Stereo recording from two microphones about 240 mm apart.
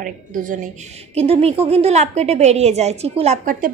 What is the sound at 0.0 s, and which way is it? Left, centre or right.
A woman's voice, right.